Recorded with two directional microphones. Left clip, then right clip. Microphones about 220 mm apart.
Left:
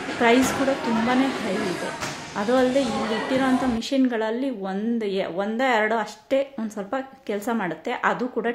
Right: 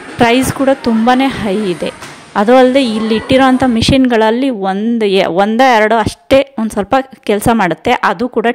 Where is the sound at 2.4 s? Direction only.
40° right (ahead or behind).